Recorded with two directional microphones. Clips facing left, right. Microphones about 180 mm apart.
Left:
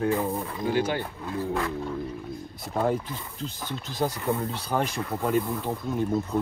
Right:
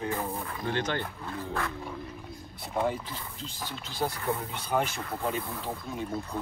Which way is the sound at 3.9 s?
35° left (ahead or behind).